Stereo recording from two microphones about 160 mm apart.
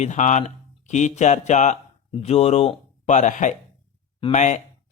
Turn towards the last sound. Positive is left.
turn(degrees=50)  # may be behind; listen again after turning